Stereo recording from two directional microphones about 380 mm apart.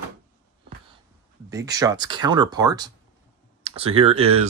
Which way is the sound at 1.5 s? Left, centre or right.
Centre.